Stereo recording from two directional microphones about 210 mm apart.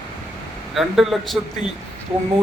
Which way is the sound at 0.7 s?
Centre (ahead or behind).